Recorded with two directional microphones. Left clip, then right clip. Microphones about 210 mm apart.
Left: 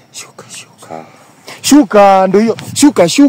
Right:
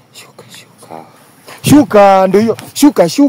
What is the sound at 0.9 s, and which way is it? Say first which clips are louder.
Speech: left 3 dB; 30° left (ahead or behind).